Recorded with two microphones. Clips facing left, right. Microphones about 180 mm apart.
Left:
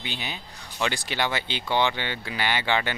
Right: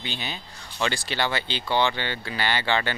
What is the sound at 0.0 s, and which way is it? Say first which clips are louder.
Speech: right 1 dB; 10° left (ahead or behind).